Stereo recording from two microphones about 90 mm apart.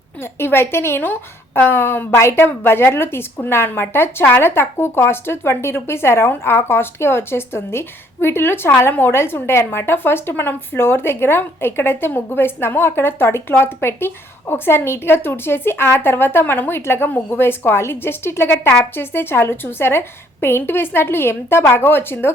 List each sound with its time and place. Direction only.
0.2 s a woman's voice: 25° left (ahead or behind)